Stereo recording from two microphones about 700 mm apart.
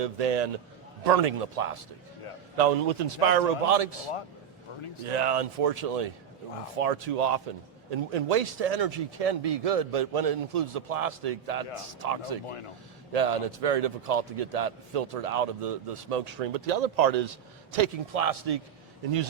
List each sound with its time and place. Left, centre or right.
0.0 s a man's voice: right
2.6 s a man's voice: right
5.0 s a man's voice: right